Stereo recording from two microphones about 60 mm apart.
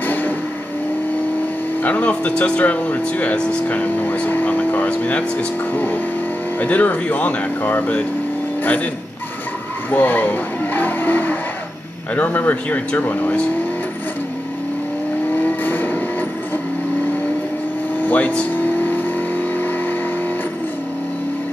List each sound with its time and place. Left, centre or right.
0.0 s vehicle: left
1.8 s speech: left
6.6 s speech: left
9.8 s vehicle: left
12.2 s speech: left
15.3 s vehicle: left
18.0 s vehicle: left